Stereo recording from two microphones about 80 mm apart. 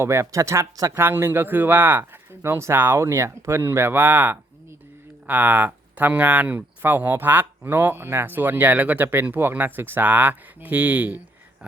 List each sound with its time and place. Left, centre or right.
0.0 s speech: right
1.0 s speech: right